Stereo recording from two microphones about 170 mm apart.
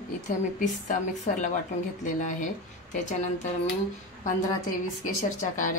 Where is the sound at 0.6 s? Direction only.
45° left (ahead or behind).